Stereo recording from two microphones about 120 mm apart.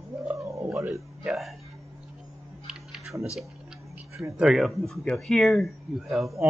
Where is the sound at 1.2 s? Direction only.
Centre (ahead or behind).